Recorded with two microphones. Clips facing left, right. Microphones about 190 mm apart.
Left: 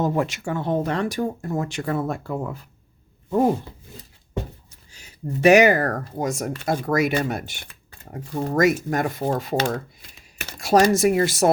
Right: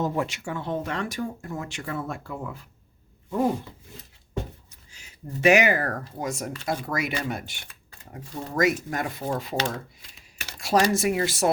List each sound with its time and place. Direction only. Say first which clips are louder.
0.0 s speech: left 4 dB; 45° left (ahead or behind)
5.4 s speech: left 5 dB; 40° left (ahead or behind)